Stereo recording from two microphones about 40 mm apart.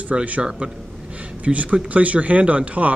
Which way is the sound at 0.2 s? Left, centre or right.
Right.